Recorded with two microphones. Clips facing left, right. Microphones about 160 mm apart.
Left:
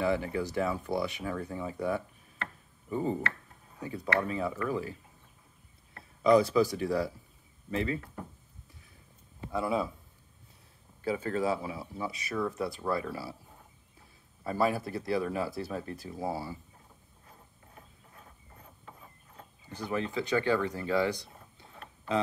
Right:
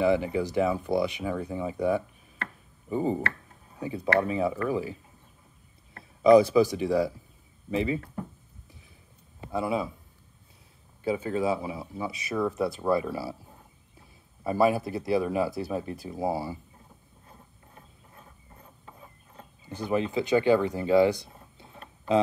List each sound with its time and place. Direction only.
0.0 s speech: 15° right (ahead or behind)
6.5 s speech: 20° right (ahead or behind)
9.5 s speech: 20° right (ahead or behind)
11.1 s speech: 15° right (ahead or behind)
14.4 s speech: 15° right (ahead or behind)
19.7 s speech: 20° right (ahead or behind)